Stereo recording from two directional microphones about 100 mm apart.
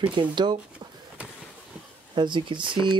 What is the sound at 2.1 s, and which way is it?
Speech, 50° right (ahead or behind).